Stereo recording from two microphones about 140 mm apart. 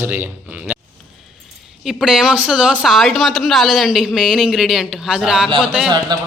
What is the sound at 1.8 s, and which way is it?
A man's voice, 5° right (ahead or behind).